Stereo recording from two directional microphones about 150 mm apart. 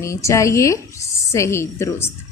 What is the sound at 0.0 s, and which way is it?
A woman's voice, 20° left (ahead or behind).